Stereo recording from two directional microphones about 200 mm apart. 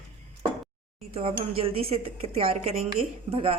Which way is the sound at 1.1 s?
30° right (ahead or behind).